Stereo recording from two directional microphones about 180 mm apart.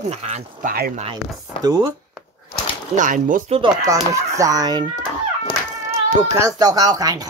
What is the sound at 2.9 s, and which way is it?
Speech, 45° right (ahead or behind).